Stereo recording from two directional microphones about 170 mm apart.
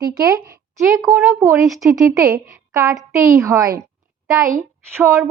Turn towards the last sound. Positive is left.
turn(degrees=-15)  # may be behind; listen again after turning